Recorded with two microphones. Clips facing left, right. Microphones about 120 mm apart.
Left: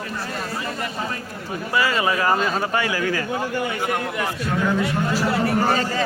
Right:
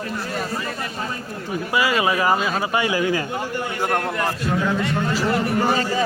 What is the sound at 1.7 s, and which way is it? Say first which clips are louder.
Speech: right 1 dB; 15° right (ahead or behind).